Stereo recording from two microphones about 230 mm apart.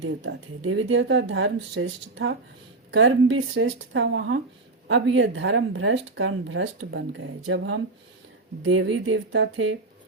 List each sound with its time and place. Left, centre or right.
0.0 s speech: right